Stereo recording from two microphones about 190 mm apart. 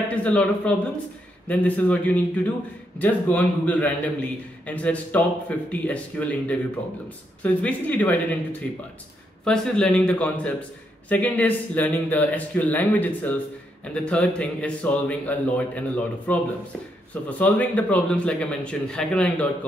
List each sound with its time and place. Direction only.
0.1 s a man's voice: 5° left (ahead or behind)